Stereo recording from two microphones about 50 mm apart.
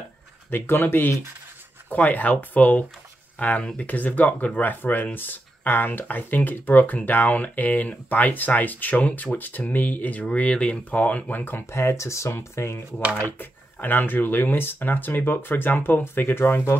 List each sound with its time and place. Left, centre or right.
0.5 s speech: left
1.9 s speech: left
11.3 s speech: left
11.7 s speech: left
13.4 s speech: left